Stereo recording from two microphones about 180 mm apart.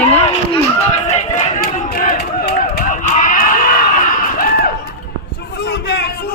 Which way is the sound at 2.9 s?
45° left (ahead or behind).